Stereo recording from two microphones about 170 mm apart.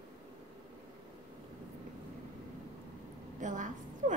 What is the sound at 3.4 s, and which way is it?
Speech, 50° right (ahead or behind).